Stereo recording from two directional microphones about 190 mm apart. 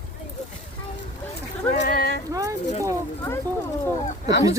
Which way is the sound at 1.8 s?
55° left (ahead or behind).